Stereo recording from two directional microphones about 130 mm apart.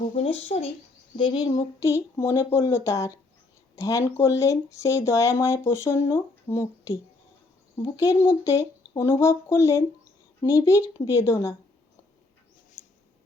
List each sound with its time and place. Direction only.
0.1 s speech: 50° left (ahead or behind)
1.1 s speech: 35° left (ahead or behind); by 6.9 s 20° left (ahead or behind)
7.9 s speech: 25° left (ahead or behind)